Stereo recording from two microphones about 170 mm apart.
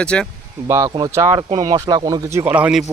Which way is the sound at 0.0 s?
5° left (ahead or behind).